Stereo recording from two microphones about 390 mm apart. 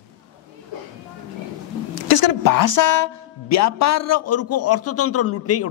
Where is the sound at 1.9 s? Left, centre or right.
Left.